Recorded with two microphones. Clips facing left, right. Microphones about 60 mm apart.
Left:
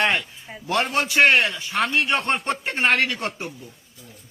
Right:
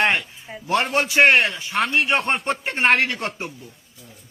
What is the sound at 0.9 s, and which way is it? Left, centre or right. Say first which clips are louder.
Speech: right 1 dB; right.